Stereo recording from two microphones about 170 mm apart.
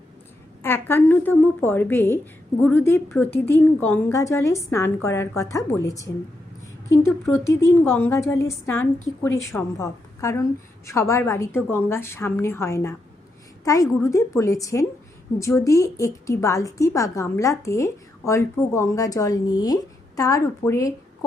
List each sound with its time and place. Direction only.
0.6 s a woman's voice: 15° left (ahead or behind)